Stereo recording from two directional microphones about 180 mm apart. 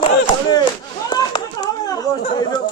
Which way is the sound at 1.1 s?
20° left (ahead or behind).